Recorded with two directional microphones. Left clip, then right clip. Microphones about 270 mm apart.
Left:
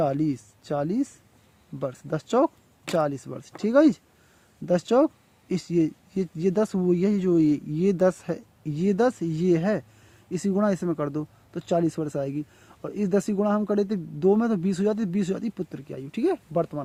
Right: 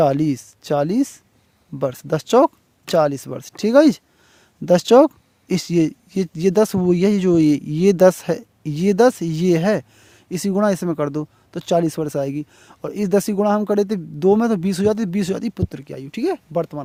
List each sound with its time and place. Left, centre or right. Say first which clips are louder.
0.0 s speech: right 8 dB; right